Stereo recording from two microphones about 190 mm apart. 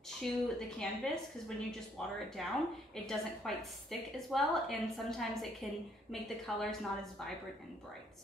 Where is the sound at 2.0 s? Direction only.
Centre (ahead or behind).